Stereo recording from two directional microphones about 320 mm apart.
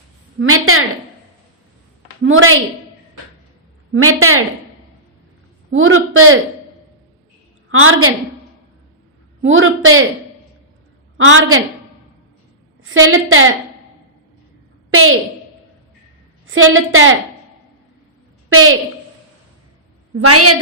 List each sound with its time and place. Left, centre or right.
0.3 s a woman's voice: right
2.2 s a woman's voice: right
3.9 s a woman's voice: right
5.7 s a woman's voice: right
7.7 s a woman's voice: right
9.4 s a woman's voice: right
11.2 s a woman's voice: right
12.8 s a woman's voice: right
14.8 s a sound: right
16.5 s a woman's voice: right
18.4 s a woman's voice: right
20.1 s a woman's voice: right